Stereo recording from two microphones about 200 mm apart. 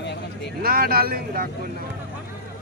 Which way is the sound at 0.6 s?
50° right (ahead or behind).